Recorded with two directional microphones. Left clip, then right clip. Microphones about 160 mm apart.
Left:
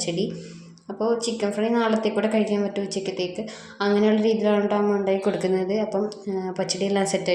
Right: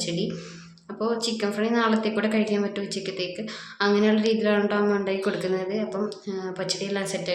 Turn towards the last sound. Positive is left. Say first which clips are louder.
# left 5 dB
turn(degrees=30)  # may be behind; listen again after turning